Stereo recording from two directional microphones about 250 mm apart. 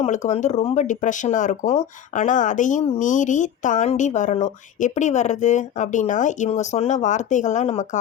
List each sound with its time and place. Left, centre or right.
0.0 s speech: left